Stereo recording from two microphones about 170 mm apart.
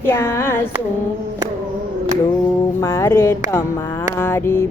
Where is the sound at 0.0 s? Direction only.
15° left (ahead or behind).